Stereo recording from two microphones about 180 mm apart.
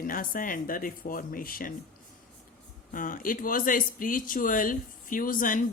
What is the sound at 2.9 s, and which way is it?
Speech, 50° left (ahead or behind).